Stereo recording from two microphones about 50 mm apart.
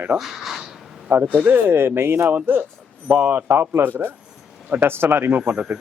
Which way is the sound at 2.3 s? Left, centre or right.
Right.